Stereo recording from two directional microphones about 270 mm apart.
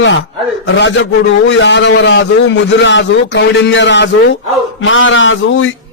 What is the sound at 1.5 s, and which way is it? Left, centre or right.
A man's voice, left.